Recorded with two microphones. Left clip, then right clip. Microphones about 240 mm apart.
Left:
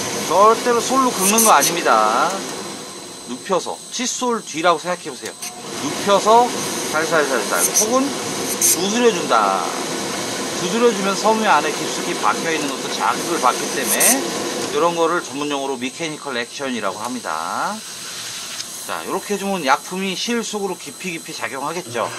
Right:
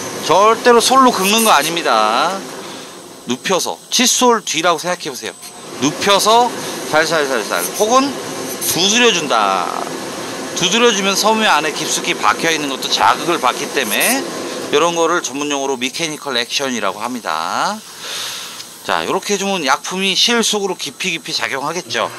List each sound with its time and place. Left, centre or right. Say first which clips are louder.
0.3 s speech: right 4 dB; right
3.4 s speech: right 3 dB; right
6.0 s speech: right 2 dB; right
10.7 s speech: right 4 dB; right
18.9 s speech: right 7 dB; right